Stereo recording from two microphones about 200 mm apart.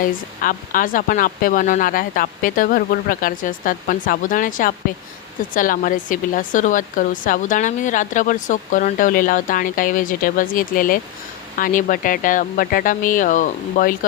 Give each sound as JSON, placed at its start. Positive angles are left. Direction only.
{"t": 0.0, "sound": "speech", "side_deg": 45}